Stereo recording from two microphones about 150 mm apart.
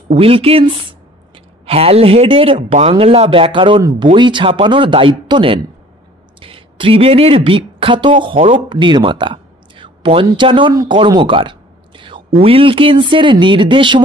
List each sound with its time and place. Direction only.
0.1 s speech: 40° right (ahead or behind)